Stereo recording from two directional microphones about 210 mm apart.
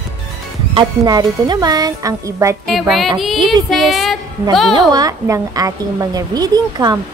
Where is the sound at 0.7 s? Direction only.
20° right (ahead or behind).